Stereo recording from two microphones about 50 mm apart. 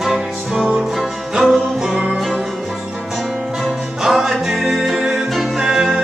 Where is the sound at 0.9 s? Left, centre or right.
Centre.